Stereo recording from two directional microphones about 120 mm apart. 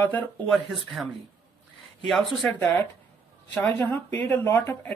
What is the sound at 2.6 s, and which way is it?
Speech, 20° left (ahead or behind).